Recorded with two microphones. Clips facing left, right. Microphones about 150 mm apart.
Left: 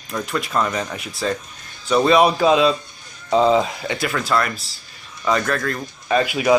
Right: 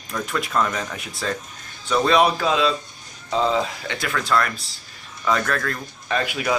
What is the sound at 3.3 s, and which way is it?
Speech, 30° left (ahead or behind).